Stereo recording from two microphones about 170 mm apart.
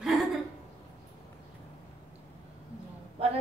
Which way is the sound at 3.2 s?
35° right (ahead or behind).